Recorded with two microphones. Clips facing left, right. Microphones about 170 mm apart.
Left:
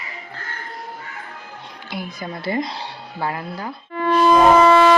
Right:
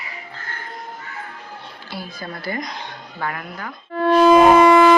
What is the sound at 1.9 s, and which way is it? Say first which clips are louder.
A woman's voice: left 2 dB; 20° left (ahead or behind).